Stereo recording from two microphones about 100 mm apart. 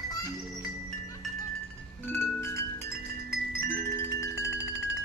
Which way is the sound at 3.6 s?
25° left (ahead or behind).